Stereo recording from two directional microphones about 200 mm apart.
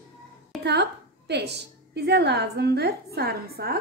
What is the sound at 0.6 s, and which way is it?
A woman's voice, 55° right (ahead or behind).